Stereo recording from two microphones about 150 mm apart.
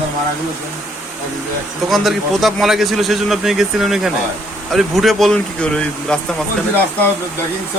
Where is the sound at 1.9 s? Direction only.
Centre (ahead or behind).